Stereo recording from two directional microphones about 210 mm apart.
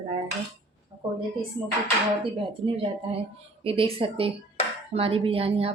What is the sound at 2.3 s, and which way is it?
A woman's voice, 25° right (ahead or behind).